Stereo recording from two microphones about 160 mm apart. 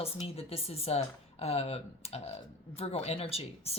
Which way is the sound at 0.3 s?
40° left (ahead or behind).